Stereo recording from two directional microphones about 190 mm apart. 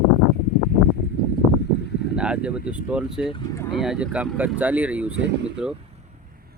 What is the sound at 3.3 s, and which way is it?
Speech, 15° left (ahead or behind).